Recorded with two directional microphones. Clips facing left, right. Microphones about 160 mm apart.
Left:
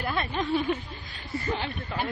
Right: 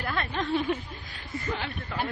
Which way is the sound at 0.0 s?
15° left (ahead or behind).